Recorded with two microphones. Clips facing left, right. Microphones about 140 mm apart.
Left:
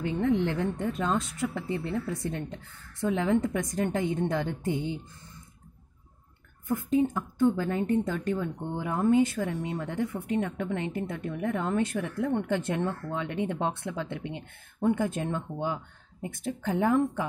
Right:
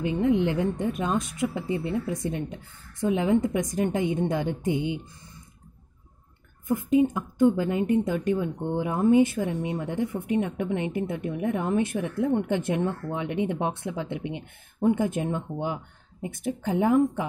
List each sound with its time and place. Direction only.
0.0 s speech: 15° right (ahead or behind)
6.7 s speech: 15° right (ahead or behind)